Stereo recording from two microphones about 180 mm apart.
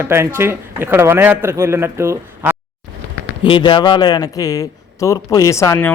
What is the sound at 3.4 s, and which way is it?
A man's voice, 25° left (ahead or behind).